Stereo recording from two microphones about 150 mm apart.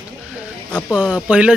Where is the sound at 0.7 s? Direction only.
10° left (ahead or behind).